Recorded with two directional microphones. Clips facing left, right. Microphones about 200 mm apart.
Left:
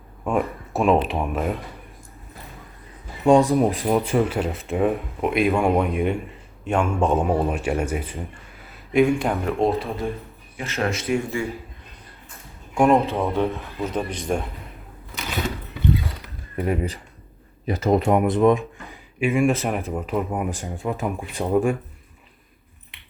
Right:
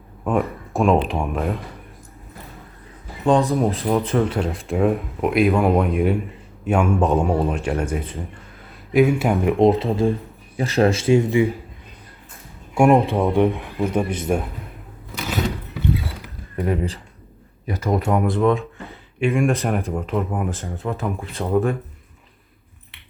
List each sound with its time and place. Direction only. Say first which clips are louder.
0.3 s a sound: right 2 dB; centre (ahead or behind)
1.0 s speech: right 1 dB; centre (ahead or behind)
3.2 s speech: left 2 dB; 15° left (ahead or behind)
8.9 s speech: right 2 dB; 5° right (ahead or behind); by 10.1 s 25° right (ahead or behind)
10.6 s speech: right 8 dB; 35° right (ahead or behind)
12.7 s speech: right 3 dB; 10° right (ahead or behind)
16.6 s speech: right 1 dB; 10° left (ahead or behind)
17.7 s speech: left 2 dB; 25° left (ahead or behind)
19.3 s speech: even; centre (ahead or behind)